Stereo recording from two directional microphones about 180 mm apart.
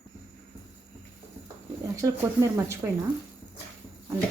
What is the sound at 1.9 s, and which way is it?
Speech, 20° right (ahead or behind).